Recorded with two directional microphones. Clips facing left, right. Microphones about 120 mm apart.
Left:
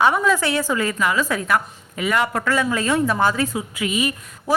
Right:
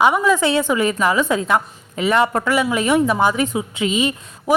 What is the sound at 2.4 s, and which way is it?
Speech, 15° right (ahead or behind).